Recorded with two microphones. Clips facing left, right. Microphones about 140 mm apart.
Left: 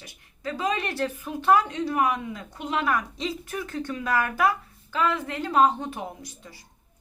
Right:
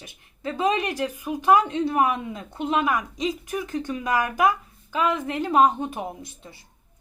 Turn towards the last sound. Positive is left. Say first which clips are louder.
# right 3 dB
turn(degrees=-25)  # may be behind; listen again after turning